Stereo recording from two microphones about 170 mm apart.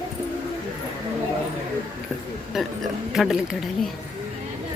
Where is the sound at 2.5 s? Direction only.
Centre (ahead or behind).